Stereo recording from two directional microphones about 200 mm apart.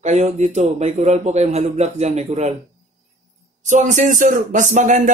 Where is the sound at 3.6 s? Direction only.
35° right (ahead or behind).